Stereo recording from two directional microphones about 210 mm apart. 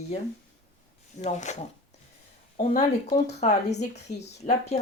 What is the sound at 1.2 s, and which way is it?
Speech, 35° left (ahead or behind).